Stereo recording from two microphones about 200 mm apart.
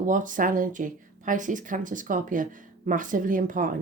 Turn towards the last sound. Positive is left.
turn(degrees=-40)  # may be behind; listen again after turning